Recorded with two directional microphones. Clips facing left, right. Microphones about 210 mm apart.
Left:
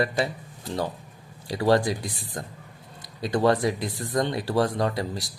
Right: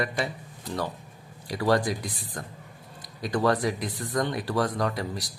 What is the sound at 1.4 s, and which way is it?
Speech, 25° left (ahead or behind).